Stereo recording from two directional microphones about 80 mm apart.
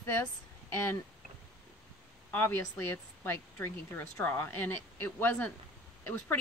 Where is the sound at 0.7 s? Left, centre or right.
Left.